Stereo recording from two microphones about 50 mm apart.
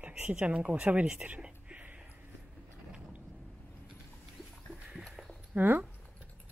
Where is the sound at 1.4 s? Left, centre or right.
Right.